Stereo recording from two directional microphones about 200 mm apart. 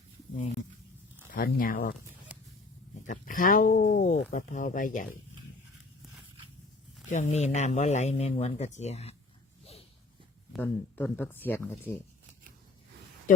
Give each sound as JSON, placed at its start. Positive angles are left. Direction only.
{"t": 1.3, "sound": "speech", "side_deg": 45}
{"t": 3.1, "sound": "speech", "side_deg": 40}
{"t": 7.1, "sound": "speech", "side_deg": 35}
{"t": 10.5, "sound": "speech", "side_deg": 10}